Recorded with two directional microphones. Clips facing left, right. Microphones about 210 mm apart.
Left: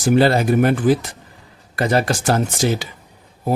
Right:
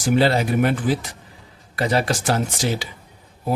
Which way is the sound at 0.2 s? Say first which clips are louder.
Left 3 dB; 45° left (ahead or behind).